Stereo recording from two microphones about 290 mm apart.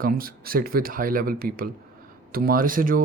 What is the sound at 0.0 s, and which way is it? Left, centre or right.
Speech, right.